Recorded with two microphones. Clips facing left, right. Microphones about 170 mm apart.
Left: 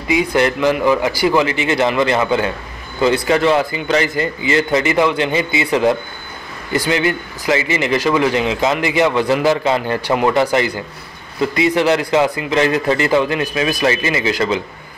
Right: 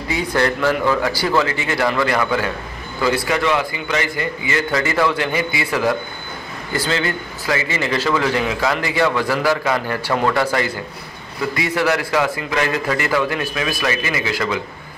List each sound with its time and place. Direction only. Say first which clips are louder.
0.1 s a man's voice: left 4 dB; 15° left (ahead or behind)